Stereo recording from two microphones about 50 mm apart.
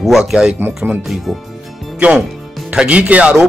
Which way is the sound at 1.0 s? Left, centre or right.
Centre.